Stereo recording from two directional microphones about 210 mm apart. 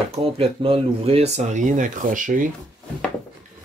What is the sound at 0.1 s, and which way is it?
Speech, 25° right (ahead or behind).